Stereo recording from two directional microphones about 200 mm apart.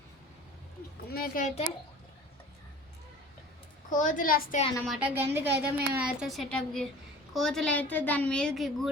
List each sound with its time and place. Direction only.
1.1 s a woman's voice: 45° left (ahead or behind)
3.8 s a woman's voice: 40° left (ahead or behind)
4.9 s a woman's voice: 5° right (ahead or behind)